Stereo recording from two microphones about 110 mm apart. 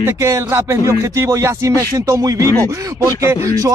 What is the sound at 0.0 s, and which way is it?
Speech, 25° right (ahead or behind).